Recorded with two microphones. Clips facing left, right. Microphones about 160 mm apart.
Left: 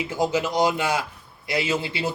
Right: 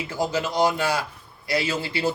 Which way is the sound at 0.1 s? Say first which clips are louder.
Left 1 dB; 20° left (ahead or behind).